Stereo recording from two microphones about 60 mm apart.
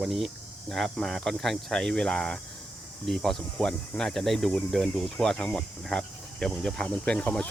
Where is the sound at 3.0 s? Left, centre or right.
Centre.